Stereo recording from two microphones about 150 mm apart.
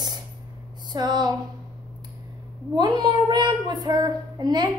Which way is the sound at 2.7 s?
30° right (ahead or behind).